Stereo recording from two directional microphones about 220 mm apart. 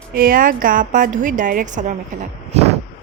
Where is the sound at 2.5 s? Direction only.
30° right (ahead or behind).